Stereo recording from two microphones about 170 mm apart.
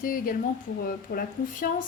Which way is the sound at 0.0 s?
55° left (ahead or behind).